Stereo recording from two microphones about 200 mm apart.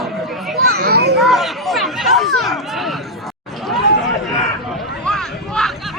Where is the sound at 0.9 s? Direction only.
55° right (ahead or behind).